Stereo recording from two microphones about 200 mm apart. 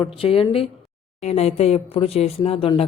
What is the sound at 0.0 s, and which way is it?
Speech, 30° left (ahead or behind).